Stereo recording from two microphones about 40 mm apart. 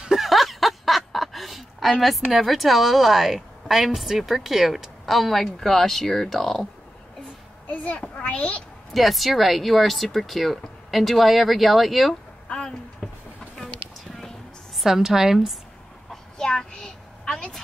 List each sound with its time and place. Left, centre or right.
0.0 s speech: centre
7.7 s a sound: left
8.2 s a child's voice: left
8.9 s speech: centre
12.4 s a sound: centre
14.8 s a woman's voice: centre
16.1 s child singing: centre